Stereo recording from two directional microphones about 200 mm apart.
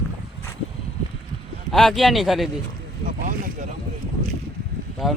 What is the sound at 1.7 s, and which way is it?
Speech, centre (ahead or behind).